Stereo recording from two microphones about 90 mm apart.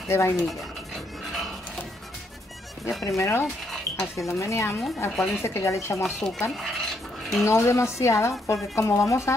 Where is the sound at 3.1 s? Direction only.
35° left (ahead or behind).